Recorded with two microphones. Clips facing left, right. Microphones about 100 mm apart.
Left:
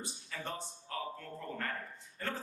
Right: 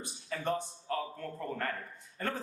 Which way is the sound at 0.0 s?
50° right (ahead or behind).